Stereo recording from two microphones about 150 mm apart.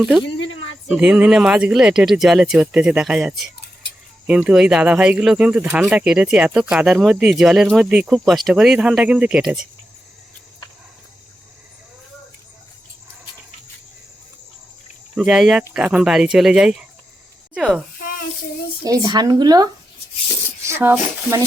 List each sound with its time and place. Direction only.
0.9 s speech: 5° right (ahead or behind)
15.1 s speech: 5° right (ahead or behind)
18.9 s speech: 25° right (ahead or behind)